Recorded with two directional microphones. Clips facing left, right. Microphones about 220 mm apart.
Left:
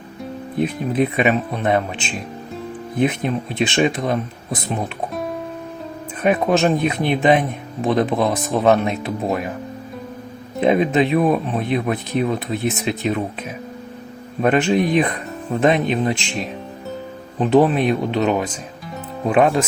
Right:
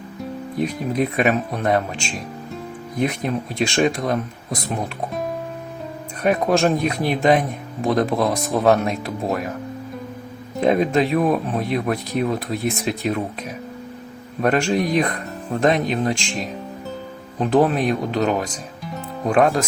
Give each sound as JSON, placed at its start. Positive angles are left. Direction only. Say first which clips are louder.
{"t": 0.6, "sound": "speech", "louder": "left 2 dB", "side_deg": 0}
{"t": 6.2, "sound": "speech", "louder": "left 1 dB", "side_deg": 0}
{"t": 10.6, "sound": "speech", "louder": "left 1 dB", "side_deg": 0}
{"t": 14.4, "sound": "speech", "louder": "left 2 dB", "side_deg": 5}